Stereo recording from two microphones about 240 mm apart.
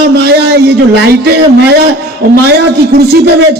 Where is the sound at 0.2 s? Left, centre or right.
Right.